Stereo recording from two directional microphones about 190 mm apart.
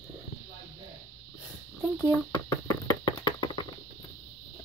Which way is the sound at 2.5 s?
15° left (ahead or behind).